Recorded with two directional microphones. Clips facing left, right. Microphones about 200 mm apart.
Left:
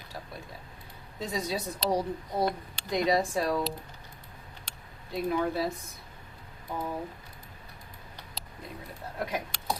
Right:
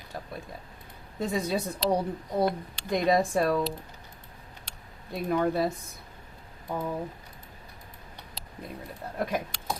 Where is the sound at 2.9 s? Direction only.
55° right (ahead or behind).